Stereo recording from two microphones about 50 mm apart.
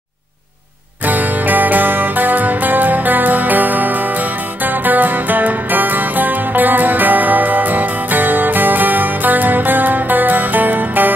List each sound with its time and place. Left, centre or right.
1.0 s music: right